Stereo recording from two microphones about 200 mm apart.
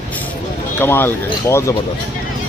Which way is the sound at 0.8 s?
10° left (ahead or behind).